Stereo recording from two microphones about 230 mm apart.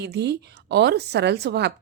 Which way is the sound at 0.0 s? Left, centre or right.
Right.